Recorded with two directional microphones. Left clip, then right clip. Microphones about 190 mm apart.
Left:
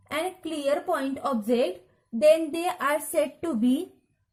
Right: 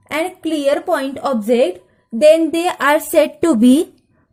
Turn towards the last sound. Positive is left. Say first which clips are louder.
# right 14 dB
turn(degrees=-50)  # may be behind; listen again after turning